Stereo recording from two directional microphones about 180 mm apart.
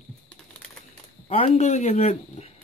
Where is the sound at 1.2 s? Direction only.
35° left (ahead or behind).